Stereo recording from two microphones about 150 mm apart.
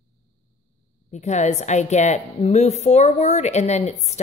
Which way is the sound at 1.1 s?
50° left (ahead or behind).